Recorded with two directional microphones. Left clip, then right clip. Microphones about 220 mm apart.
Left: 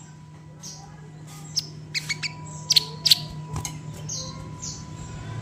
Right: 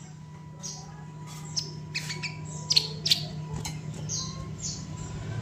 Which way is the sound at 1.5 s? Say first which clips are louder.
Left 5 dB; 30° left (ahead or behind).